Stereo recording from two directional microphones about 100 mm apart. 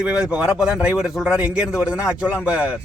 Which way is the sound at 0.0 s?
10° right (ahead or behind).